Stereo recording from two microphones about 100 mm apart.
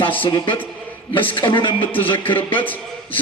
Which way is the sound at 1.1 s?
60° left (ahead or behind).